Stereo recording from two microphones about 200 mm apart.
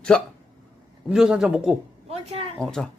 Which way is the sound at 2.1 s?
30° right (ahead or behind).